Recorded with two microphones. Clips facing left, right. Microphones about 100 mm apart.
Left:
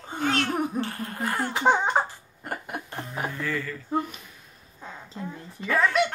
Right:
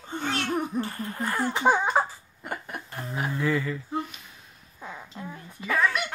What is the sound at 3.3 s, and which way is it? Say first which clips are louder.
Music: right 8 dB; 20° right (ahead or behind).